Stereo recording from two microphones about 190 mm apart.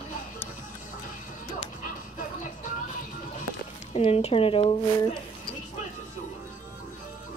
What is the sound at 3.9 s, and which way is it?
Speech, 35° left (ahead or behind).